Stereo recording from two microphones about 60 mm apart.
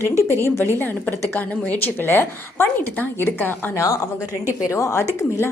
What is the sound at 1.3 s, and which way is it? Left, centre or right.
Speech, left.